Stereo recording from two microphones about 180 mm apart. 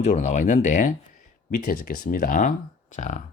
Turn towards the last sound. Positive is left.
turn(degrees=40)  # may be behind; listen again after turning